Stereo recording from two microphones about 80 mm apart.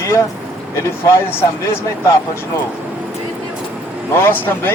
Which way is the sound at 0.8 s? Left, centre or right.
Left.